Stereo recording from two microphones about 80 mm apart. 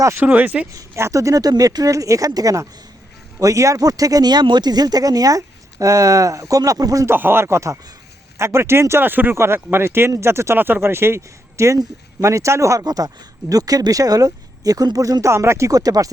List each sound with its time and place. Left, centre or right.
0.0 s speech: right
0.7 s speech: right
7.0 s speech: right